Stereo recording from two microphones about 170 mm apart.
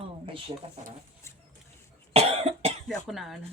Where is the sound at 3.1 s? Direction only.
Centre (ahead or behind).